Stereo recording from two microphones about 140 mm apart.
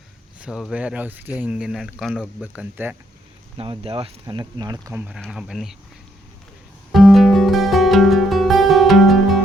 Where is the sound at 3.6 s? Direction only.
40° right (ahead or behind).